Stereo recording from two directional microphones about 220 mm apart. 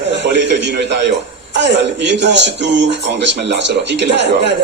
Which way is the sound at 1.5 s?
50° right (ahead or behind).